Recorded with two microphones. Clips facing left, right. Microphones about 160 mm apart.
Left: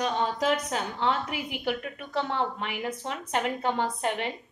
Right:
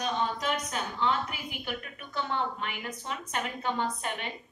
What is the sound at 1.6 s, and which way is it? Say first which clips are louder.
A woman's voice: left 7 dB; 75° left (ahead or behind).